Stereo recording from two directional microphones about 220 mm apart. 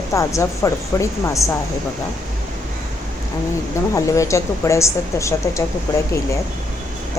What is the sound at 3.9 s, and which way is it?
A woman's voice, 15° left (ahead or behind).